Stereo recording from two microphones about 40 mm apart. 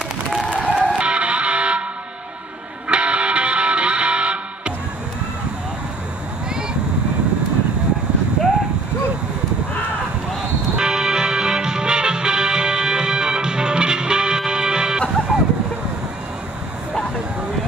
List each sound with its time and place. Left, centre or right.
0.5 s music: right
2.9 s music: right
10.8 s music: centre